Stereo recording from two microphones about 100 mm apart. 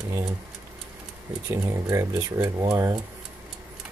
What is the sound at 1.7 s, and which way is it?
Speech, 35° right (ahead or behind).